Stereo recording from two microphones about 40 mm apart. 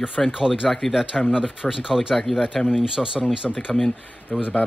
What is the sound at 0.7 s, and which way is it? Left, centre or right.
Speech, centre.